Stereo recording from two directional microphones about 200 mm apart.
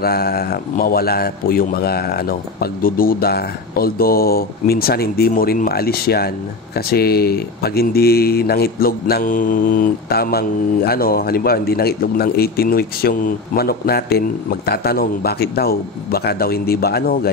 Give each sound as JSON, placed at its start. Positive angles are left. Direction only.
{"t": 0.0, "sound": "speech", "side_deg": 50}